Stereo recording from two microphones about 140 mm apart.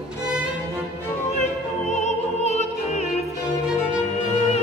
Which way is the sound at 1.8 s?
55° left (ahead or behind).